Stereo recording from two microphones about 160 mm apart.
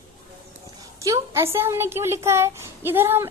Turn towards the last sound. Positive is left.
turn(degrees=-15)  # may be behind; listen again after turning